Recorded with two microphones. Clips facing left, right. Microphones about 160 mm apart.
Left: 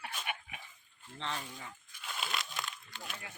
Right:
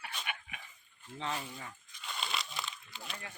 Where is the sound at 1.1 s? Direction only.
5° right (ahead or behind).